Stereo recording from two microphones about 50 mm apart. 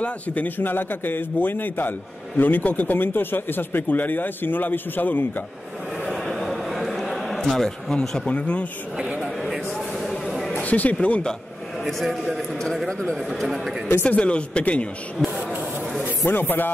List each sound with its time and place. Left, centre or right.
0.0 s a man's voice: left
6.0 s a sound: centre
7.6 s speech: centre
8.3 s speech: left
9.4 s a sound: centre
10.5 s speech: left
11.8 s a man's voice: centre
14.0 s speech: left
16.3 s speech: left